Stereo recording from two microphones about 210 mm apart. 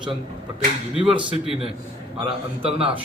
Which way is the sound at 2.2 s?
25° right (ahead or behind).